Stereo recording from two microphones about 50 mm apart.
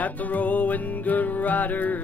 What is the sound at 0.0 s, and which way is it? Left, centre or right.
Music, left.